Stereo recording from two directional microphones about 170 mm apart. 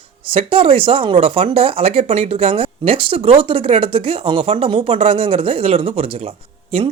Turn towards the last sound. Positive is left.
turn(degrees=-35)  # may be behind; listen again after turning